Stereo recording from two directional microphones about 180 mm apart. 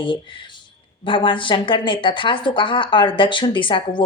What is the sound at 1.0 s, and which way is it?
Speech, 30° left (ahead or behind).